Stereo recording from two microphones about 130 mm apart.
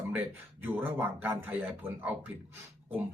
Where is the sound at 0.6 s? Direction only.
15° right (ahead or behind).